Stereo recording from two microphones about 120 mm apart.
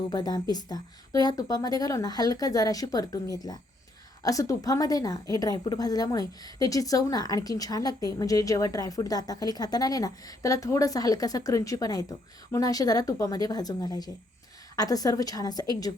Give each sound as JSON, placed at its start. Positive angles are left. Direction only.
{"t": 0.1, "sound": "a woman's voice", "side_deg": 35}